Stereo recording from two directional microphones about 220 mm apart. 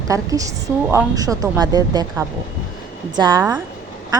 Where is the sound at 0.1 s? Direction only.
15° right (ahead or behind).